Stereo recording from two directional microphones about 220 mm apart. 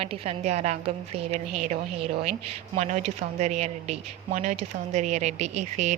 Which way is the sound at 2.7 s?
30° right (ahead or behind).